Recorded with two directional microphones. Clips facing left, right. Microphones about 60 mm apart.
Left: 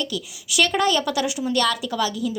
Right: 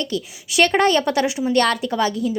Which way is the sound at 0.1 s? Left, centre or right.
Right.